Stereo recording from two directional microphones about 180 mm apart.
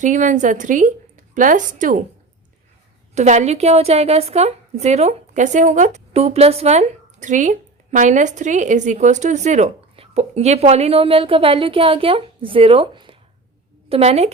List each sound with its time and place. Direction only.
0.0 s a woman's voice: 45° right (ahead or behind)
3.2 s a woman's voice: 40° right (ahead or behind)